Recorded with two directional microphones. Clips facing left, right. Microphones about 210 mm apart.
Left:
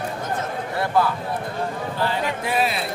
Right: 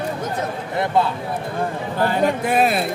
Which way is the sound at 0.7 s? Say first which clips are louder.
Right 2 dB; 20° right (ahead or behind).